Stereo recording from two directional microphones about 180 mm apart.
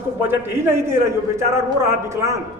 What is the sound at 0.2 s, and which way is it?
Speech, 10° right (ahead or behind).